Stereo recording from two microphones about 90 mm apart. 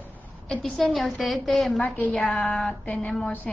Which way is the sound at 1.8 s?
20° left (ahead or behind).